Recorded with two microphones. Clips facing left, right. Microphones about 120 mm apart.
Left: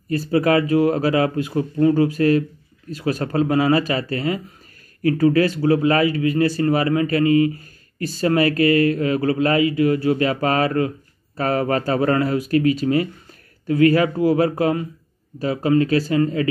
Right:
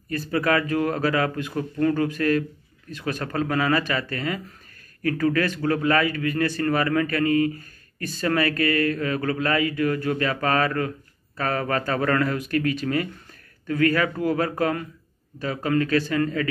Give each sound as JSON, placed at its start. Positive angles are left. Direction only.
{"t": 0.1, "sound": "speech", "side_deg": 30}
{"t": 8.0, "sound": "speech", "side_deg": 30}
{"t": 8.5, "sound": "speech", "side_deg": 20}